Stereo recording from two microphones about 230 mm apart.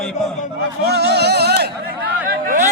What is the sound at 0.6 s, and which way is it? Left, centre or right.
A man's voice, right.